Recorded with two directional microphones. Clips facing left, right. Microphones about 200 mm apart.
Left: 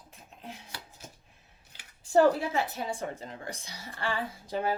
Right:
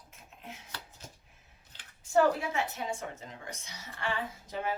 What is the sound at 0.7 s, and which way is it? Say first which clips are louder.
Dishes: left 1 dB; 10° left (ahead or behind).